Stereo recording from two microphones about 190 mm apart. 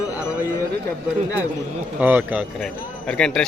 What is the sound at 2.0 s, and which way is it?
Speech, 5° right (ahead or behind).